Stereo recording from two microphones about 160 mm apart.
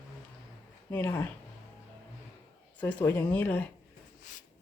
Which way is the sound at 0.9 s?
15° left (ahead or behind).